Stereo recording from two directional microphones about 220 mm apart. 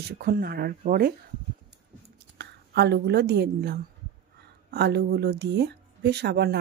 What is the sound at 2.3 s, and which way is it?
A woman's voice, 50° right (ahead or behind).